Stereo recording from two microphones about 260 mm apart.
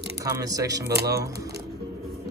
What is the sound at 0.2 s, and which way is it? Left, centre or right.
Speech, centre.